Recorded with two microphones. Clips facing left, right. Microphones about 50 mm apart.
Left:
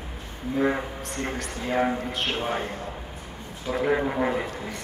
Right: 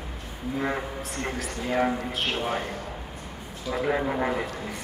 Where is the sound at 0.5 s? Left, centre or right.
Centre.